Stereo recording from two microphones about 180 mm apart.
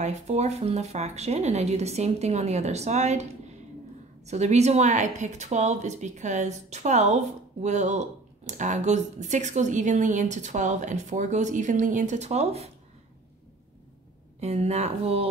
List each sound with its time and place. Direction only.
0.0 s speech: 40° right (ahead or behind)
4.3 s speech: 40° right (ahead or behind)
14.4 s speech: 35° right (ahead or behind)